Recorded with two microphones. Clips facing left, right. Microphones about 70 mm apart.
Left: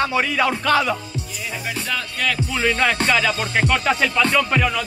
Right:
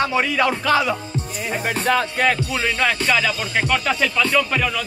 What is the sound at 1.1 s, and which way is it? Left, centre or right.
Music, right.